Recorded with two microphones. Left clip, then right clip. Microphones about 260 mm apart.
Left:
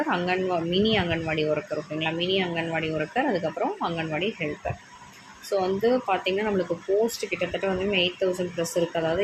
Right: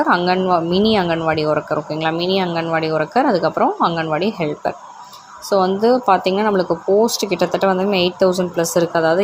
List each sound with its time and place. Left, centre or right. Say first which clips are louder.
0.1 s speech: right 11 dB; right
5.5 s speech: right 9 dB; centre